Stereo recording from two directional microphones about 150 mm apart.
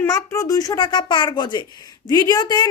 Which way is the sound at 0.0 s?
20° left (ahead or behind).